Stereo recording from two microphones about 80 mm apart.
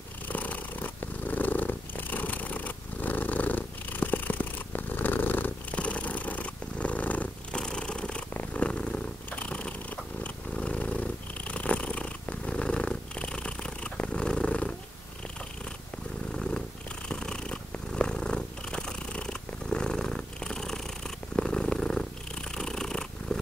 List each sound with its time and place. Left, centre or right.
0.3 s purr: centre
16.3 s purr: centre